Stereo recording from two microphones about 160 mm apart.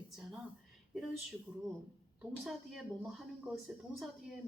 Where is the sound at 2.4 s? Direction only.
Centre (ahead or behind).